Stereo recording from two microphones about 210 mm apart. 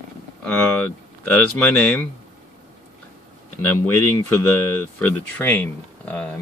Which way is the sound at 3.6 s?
10° left (ahead or behind).